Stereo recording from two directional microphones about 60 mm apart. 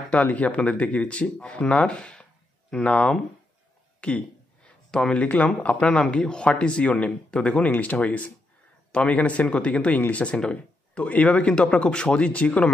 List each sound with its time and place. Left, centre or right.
0.1 s speech: left